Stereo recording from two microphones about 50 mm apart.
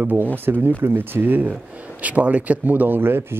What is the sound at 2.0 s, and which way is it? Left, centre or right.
Speech, right.